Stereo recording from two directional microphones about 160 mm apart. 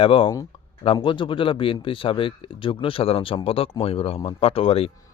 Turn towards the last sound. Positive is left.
turn(degrees=35)  # may be behind; listen again after turning